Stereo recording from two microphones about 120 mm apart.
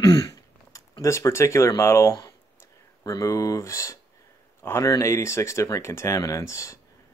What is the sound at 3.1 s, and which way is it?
Speech, 25° left (ahead or behind).